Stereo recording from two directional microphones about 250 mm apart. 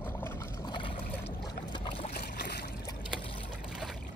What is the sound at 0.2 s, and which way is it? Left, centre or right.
Boat, centre.